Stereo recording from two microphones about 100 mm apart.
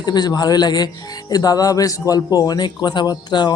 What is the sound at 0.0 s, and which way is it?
Speech, 45° left (ahead or behind).